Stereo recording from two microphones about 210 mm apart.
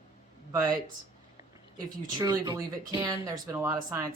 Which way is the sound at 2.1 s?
20° right (ahead or behind).